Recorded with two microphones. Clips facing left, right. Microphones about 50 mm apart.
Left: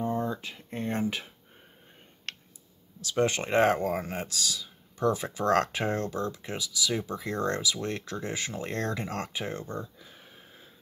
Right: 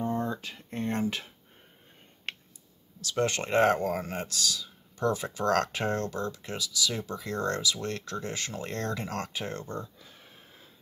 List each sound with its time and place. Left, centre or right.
0.0 s speech: centre
2.3 s clicking: centre
3.0 s speech: centre